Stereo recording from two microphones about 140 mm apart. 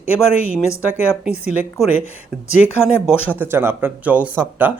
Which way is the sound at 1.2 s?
55° left (ahead or behind).